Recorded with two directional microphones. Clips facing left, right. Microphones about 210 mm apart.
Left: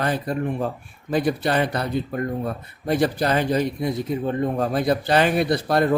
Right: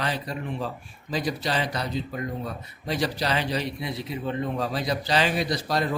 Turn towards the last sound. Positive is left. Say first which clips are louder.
# left 7 dB
turn(degrees=55)  # may be behind; listen again after turning